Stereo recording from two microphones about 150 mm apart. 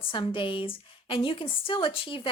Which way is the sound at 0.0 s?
35° left (ahead or behind).